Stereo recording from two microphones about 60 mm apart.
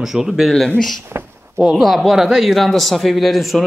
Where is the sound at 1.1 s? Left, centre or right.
Right.